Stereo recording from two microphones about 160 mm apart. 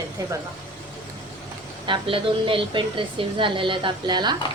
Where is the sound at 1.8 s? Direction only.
30° right (ahead or behind).